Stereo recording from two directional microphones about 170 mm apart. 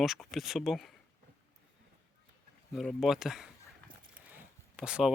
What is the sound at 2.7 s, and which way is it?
Speech, centre (ahead or behind).